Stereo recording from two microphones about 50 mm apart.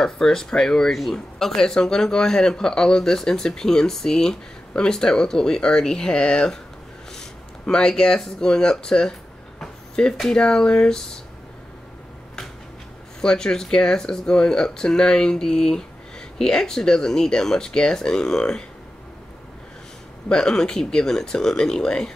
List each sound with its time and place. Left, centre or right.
0.0 s speech: centre
9.6 s a sound: centre
10.3 s speech: centre
13.2 s speech: centre
20.2 s speech: centre